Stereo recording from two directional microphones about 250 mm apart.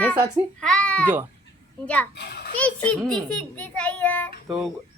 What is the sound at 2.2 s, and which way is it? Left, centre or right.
Speech, left.